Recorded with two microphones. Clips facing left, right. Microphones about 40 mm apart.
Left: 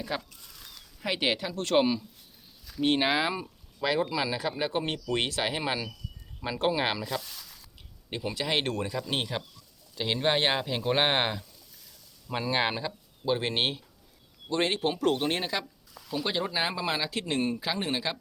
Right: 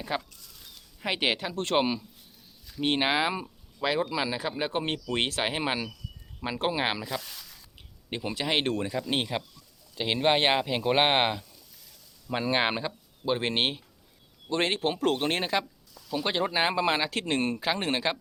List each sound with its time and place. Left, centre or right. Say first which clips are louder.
0.1 s speech: right 2 dB; right
7.3 s a sound: even; centre
8.1 s speech: right 1 dB; right